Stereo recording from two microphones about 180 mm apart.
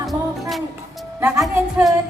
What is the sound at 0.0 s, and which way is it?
Music, centre (ahead or behind).